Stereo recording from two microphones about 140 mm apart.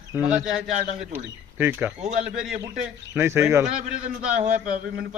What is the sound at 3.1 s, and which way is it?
Speech, 20° right (ahead or behind).